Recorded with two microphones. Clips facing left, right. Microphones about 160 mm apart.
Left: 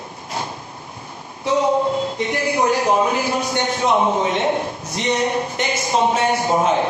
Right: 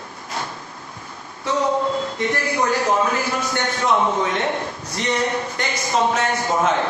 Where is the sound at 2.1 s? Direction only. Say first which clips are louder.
Left 2 dB; 15° left (ahead or behind).